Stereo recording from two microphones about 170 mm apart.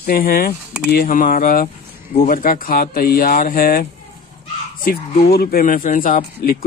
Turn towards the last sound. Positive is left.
turn(degrees=55)  # may be behind; listen again after turning